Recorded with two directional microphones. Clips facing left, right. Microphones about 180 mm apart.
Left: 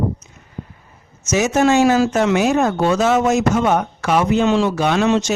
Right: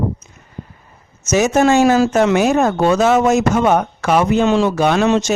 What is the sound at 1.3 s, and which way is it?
Speech, 50° right (ahead or behind).